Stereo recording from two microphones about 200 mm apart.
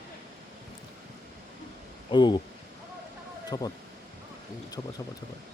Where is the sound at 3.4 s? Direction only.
20° left (ahead or behind).